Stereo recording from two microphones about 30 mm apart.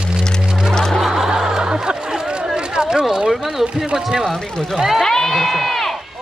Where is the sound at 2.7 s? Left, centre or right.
Right.